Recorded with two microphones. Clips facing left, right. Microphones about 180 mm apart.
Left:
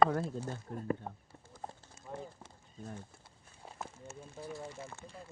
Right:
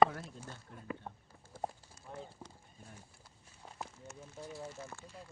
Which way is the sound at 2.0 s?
25° left (ahead or behind).